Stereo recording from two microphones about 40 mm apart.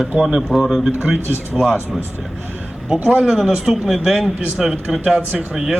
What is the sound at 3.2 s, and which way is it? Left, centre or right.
A man's voice, centre.